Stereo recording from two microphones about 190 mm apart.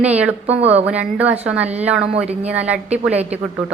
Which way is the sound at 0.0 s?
5° right (ahead or behind).